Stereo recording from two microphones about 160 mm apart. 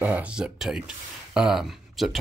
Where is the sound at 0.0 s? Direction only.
10° right (ahead or behind).